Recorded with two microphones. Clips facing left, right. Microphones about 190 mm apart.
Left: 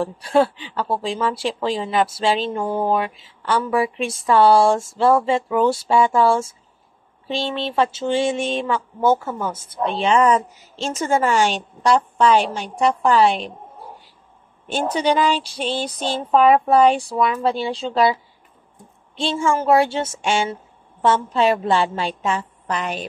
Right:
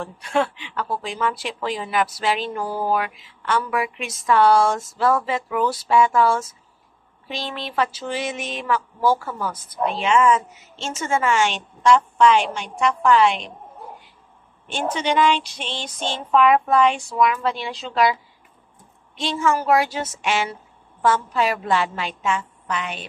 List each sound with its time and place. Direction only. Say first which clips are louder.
0.0 s speech: left 5 dB; 35° left (ahead or behind)
14.7 s speech: left 4 dB; 35° left (ahead or behind)
19.1 s speech: left 1 dB; 30° left (ahead or behind)